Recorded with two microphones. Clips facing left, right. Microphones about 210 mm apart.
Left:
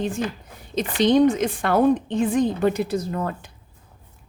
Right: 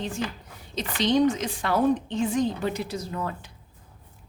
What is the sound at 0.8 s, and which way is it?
A woman's voice, 50° left (ahead or behind).